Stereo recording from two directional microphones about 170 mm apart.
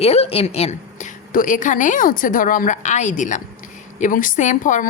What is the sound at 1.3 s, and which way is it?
A woman's voice, 50° left (ahead or behind).